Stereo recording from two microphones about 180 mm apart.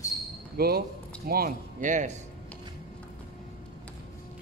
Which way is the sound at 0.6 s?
60° right (ahead or behind).